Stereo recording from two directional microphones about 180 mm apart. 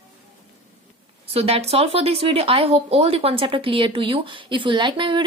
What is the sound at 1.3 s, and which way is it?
Speech, 35° right (ahead or behind).